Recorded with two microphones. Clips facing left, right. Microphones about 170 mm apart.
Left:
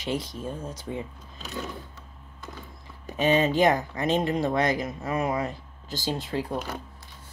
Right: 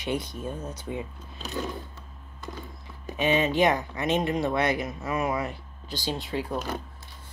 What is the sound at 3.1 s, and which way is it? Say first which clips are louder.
Speech: left 2 dB; 40° left (ahead or behind).